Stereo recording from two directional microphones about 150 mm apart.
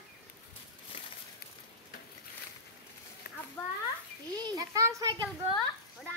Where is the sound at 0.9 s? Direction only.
35° left (ahead or behind).